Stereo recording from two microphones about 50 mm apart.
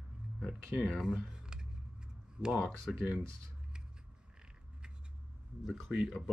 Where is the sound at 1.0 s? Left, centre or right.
Centre.